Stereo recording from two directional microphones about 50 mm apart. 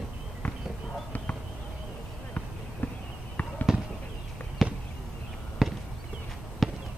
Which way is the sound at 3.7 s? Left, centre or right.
Centre.